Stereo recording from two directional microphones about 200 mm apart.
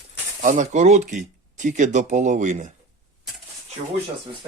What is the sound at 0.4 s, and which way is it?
Speech, 35° right (ahead or behind).